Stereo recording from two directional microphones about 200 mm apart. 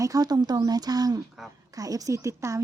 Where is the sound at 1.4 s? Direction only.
Centre (ahead or behind).